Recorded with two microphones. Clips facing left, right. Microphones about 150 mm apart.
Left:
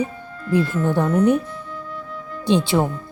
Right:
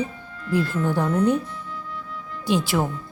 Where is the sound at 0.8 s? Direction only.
15° left (ahead or behind).